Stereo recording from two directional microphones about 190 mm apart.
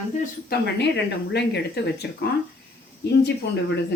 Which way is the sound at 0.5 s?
55° left (ahead or behind).